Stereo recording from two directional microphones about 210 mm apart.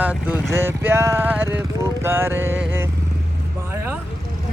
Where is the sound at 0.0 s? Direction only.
5° right (ahead or behind).